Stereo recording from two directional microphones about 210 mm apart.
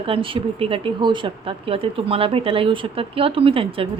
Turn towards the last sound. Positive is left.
turn(degrees=-25)  # may be behind; listen again after turning